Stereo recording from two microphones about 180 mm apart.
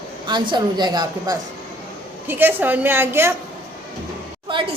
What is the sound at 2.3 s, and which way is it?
A woman's voice, 10° right (ahead or behind).